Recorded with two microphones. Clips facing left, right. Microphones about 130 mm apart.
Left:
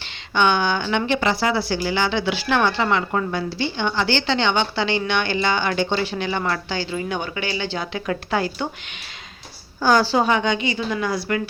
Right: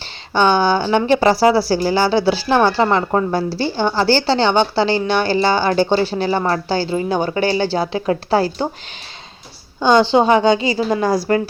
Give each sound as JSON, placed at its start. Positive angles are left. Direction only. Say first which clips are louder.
{"t": 0.3, "sound": "speech", "louder": "right 5 dB", "side_deg": -35}
{"t": 9.8, "sound": "speech", "louder": "right 5 dB", "side_deg": -20}